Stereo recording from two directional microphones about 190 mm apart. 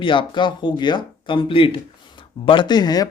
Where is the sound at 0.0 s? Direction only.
25° left (ahead or behind).